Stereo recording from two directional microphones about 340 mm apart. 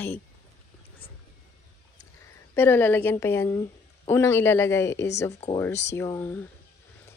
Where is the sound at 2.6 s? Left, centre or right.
Centre.